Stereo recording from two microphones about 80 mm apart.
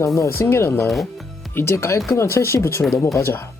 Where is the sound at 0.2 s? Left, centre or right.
Left.